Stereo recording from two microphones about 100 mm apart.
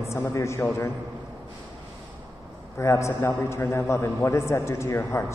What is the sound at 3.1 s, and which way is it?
A man's voice, 20° left (ahead or behind).